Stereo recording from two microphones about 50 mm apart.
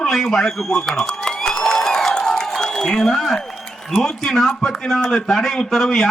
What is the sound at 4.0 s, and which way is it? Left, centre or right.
Speech, centre.